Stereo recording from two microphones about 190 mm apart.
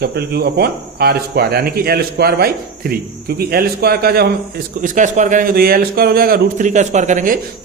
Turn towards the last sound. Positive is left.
turn(degrees=-45)  # may be behind; listen again after turning